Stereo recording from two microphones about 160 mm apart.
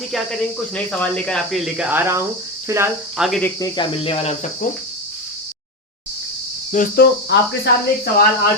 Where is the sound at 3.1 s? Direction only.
5° right (ahead or behind).